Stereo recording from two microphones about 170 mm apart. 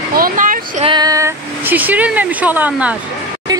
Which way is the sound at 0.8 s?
25° right (ahead or behind).